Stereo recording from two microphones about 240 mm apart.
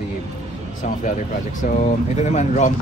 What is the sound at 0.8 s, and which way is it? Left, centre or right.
Speech, left.